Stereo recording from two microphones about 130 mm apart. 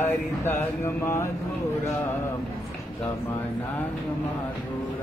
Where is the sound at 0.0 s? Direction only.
20° left (ahead or behind).